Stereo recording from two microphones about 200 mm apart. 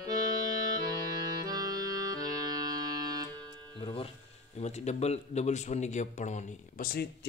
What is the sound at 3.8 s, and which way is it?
Speech, 25° left (ahead or behind).